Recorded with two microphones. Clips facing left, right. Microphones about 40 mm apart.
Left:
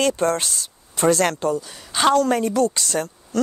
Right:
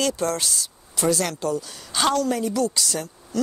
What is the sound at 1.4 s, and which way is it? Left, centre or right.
Speech, left.